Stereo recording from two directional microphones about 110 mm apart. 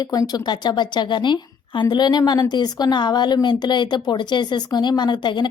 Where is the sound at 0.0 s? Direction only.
35° left (ahead or behind).